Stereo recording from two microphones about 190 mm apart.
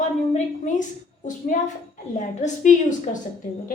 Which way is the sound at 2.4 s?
40° left (ahead or behind).